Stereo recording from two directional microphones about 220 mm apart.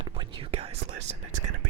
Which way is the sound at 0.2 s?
25° right (ahead or behind).